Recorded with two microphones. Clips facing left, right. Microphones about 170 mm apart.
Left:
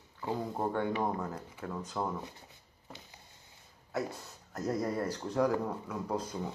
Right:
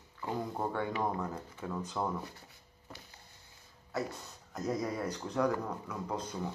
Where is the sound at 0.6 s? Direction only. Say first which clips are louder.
Left 3 dB; 5° left (ahead or behind).